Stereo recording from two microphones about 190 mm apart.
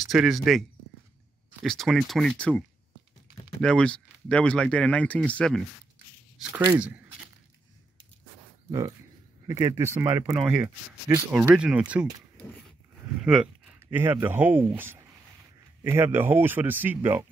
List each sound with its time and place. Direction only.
0.0 s speech: centre (ahead or behind)
3.6 s speech: 5° left (ahead or behind)
6.5 s speech: 10° right (ahead or behind)
8.6 s speech: 20° right (ahead or behind)